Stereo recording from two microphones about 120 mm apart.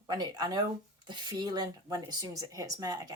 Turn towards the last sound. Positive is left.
turn(degrees=-30)  # may be behind; listen again after turning